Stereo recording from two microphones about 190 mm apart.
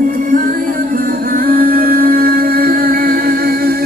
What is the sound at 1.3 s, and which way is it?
Music, 50° right (ahead or behind).